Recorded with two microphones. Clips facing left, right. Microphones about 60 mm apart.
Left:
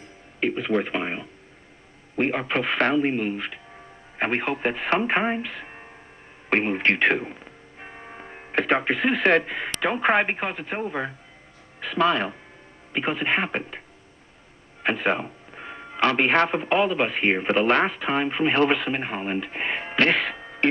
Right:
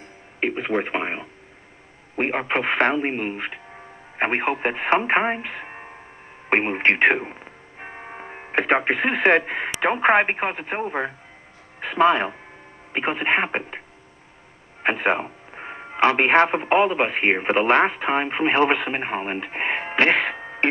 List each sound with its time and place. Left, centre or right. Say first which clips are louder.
0.4 s speech: even; right